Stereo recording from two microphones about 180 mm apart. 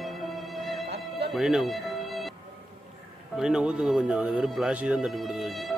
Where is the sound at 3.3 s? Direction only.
5° right (ahead or behind).